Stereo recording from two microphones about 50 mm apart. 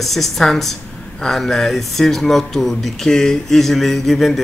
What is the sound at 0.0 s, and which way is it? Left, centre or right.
Speech, centre.